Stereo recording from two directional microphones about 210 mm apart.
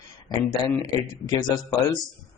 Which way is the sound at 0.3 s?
20° left (ahead or behind).